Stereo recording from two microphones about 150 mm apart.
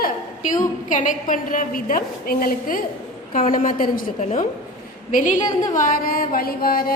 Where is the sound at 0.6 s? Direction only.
60° left (ahead or behind).